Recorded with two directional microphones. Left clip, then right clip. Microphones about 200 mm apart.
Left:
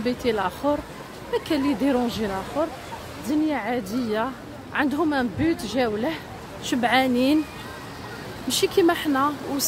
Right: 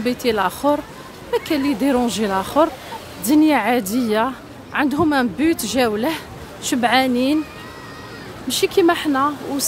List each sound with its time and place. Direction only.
0.0 s speech: 20° right (ahead or behind)
8.5 s speech: 15° right (ahead or behind)